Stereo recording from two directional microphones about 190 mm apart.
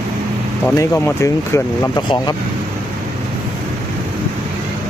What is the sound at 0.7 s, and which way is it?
Speech, 15° left (ahead or behind).